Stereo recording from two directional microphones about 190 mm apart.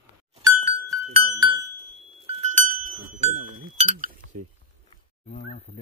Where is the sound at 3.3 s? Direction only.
45° right (ahead or behind).